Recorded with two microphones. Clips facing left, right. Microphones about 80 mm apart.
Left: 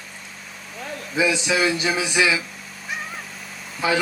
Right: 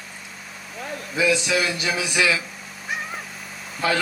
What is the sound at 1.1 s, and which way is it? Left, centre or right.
Speech, left.